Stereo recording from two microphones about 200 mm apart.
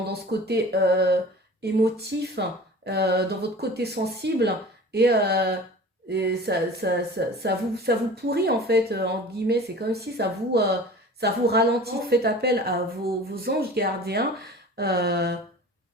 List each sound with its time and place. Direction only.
0.1 s speech: 55° right (ahead or behind)